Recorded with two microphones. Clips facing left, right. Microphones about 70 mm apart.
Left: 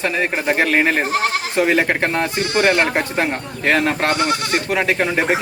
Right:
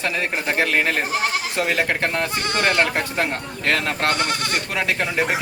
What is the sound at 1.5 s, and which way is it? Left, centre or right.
Speech, left.